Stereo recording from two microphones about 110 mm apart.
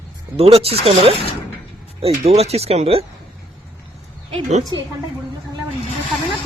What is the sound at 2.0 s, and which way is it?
Speech, 75° right (ahead or behind).